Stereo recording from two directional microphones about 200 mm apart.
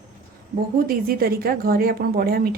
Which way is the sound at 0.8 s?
45° right (ahead or behind).